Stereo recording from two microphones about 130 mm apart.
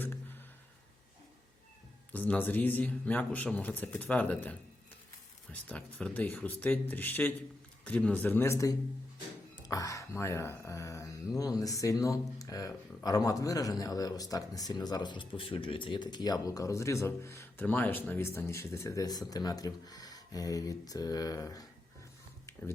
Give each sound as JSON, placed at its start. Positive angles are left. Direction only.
{"t": 2.1, "sound": "speech", "side_deg": 10}